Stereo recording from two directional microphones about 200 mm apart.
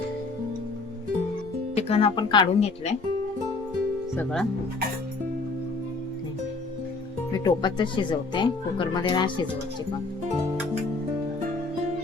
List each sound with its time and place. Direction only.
1.7 s speech: 30° left (ahead or behind)
4.2 s speech: 5° left (ahead or behind)
7.3 s speech: 20° left (ahead or behind)